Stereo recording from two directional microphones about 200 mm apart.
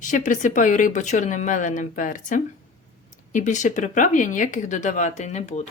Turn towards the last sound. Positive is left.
turn(degrees=35)  # may be behind; listen again after turning